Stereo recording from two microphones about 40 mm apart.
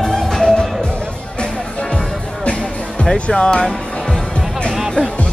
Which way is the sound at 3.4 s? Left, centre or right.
Left.